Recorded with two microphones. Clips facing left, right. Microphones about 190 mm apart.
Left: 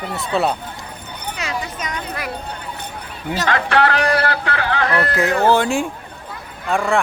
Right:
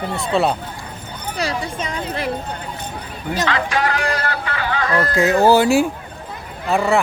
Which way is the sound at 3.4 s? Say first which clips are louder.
Left 4 dB; 55° left (ahead or behind).